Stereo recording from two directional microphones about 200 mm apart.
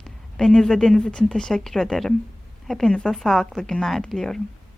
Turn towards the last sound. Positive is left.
turn(degrees=0)  # may be behind; listen again after turning